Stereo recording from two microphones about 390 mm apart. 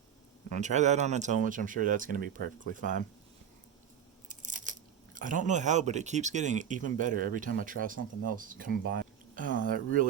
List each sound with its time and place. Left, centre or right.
0.5 s speech: centre
4.3 s biting: centre
5.1 s speech: centre